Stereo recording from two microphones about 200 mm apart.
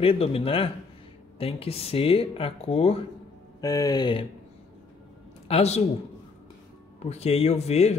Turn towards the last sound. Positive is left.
turn(degrees=30)  # may be behind; listen again after turning